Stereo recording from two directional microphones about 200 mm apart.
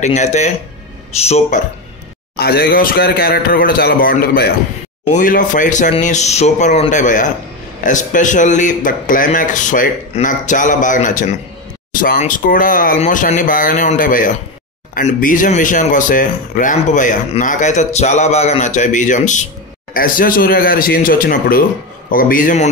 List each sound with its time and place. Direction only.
0.0 s speech: 35° left (ahead or behind)
2.3 s speech: 50° left (ahead or behind)